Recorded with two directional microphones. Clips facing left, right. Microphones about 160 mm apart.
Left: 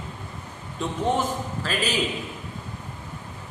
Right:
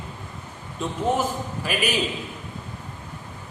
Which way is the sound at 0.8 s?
Centre (ahead or behind).